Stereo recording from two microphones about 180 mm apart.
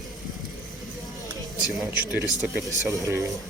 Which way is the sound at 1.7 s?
Centre (ahead or behind).